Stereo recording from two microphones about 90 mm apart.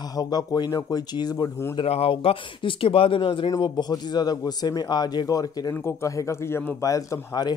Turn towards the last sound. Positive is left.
turn(degrees=45)  # may be behind; listen again after turning